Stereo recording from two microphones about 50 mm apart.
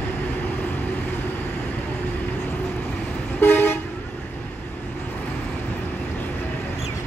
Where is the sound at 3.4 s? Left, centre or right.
Left.